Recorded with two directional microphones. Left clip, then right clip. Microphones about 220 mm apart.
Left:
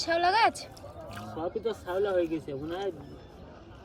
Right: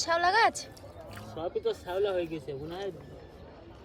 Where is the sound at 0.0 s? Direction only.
15° right (ahead or behind).